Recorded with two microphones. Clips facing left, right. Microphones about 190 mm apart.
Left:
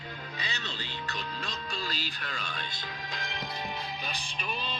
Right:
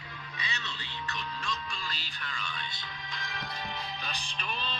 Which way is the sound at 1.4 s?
40° left (ahead or behind).